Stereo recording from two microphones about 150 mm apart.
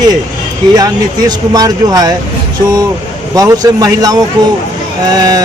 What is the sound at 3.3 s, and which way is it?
Speech, 25° right (ahead or behind).